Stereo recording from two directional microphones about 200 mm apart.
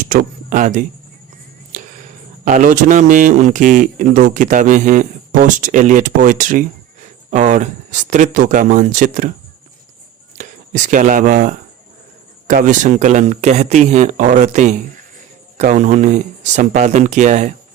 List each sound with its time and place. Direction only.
0.0 s speech: 40° right (ahead or behind)
2.4 s speech: 40° right (ahead or behind)
10.3 s speech: 40° right (ahead or behind)